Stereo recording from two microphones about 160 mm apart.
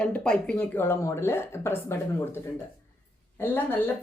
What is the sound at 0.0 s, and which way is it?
A woman's voice, 5° left (ahead or behind).